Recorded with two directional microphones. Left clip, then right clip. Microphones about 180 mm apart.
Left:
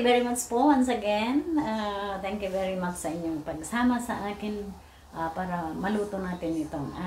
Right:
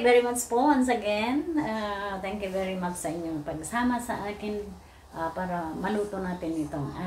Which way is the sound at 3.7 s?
5° left (ahead or behind).